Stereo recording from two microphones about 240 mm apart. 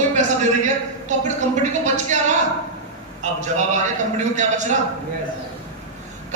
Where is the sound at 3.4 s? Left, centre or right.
Right.